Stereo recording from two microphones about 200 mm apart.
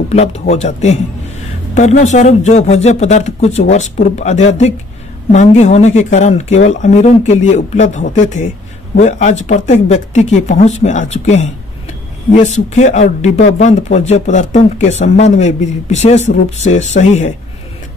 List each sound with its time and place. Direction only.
0.1 s speech: 35° left (ahead or behind)